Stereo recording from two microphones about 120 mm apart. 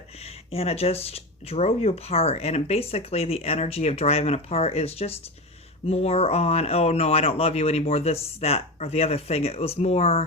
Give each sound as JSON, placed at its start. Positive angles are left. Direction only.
{"t": 0.2, "sound": "speech", "side_deg": 55}